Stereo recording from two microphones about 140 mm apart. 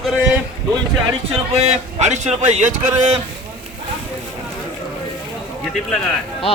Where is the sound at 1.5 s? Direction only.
50° right (ahead or behind).